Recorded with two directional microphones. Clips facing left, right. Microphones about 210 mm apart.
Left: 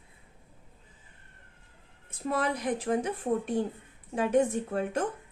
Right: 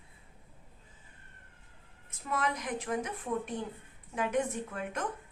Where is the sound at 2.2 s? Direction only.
35° left (ahead or behind).